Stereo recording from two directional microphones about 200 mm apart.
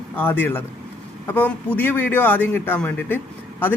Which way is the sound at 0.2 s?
10° left (ahead or behind).